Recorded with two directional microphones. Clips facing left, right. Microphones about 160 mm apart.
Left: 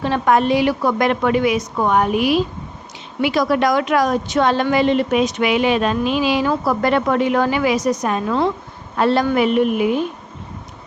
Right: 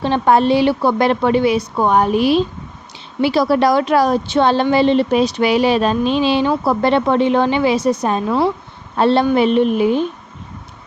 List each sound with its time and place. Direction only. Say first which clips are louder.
0.0 s a woman's voice: right 2 dB; 30° right (ahead or behind)
8.3 s speech: right 2 dB; 10° right (ahead or behind)
9.0 s a woman's voice: right 3 dB; 30° right (ahead or behind)